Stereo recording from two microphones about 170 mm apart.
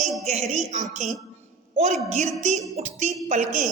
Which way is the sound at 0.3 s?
45° right (ahead or behind).